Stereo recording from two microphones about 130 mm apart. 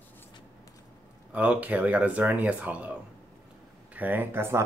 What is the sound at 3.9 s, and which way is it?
Speech, 15° right (ahead or behind).